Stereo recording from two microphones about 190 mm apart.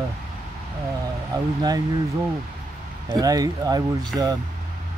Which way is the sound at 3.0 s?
20° right (ahead or behind).